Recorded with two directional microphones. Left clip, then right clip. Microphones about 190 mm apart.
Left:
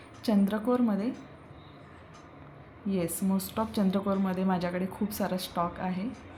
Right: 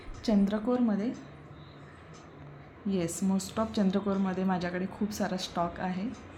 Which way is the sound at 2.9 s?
Centre (ahead or behind).